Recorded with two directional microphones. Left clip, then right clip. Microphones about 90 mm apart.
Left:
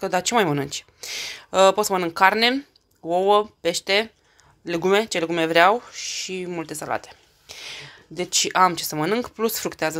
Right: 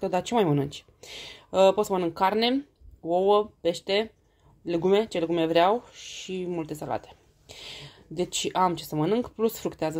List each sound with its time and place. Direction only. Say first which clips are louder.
0.0 s speech: left 4 dB; 25° right (ahead or behind)
7.5 s a sound: left 5 dB; 50° right (ahead or behind)
8.2 s speech: left 6 dB; 40° right (ahead or behind)
8.5 s speech: left 6 dB; 20° right (ahead or behind)